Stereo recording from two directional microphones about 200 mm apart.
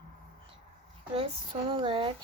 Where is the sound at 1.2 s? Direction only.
30° right (ahead or behind).